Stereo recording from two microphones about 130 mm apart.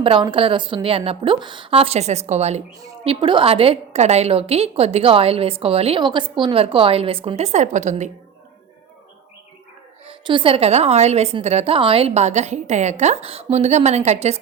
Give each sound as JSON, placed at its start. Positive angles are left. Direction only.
{"t": 0.0, "sound": "a woman's voice", "side_deg": -40}
{"t": 3.0, "sound": "a woman's voice", "side_deg": -45}
{"t": 6.0, "sound": "a woman's voice", "side_deg": -35}
{"t": 10.1, "sound": "a woman's voice", "side_deg": -40}